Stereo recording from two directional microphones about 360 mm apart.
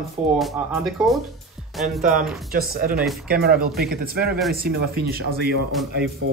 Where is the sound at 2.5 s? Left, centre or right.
Right.